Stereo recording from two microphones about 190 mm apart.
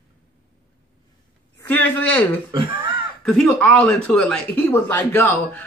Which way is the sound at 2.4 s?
25° right (ahead or behind).